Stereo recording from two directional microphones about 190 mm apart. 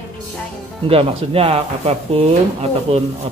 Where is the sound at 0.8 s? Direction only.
30° right (ahead or behind).